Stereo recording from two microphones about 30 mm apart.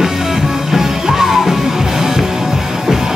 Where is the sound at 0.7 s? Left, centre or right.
Centre.